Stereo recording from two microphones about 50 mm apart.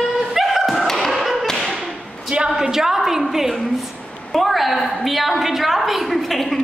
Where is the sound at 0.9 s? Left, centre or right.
Centre.